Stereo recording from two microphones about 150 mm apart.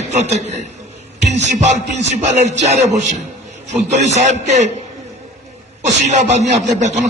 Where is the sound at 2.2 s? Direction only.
50° right (ahead or behind).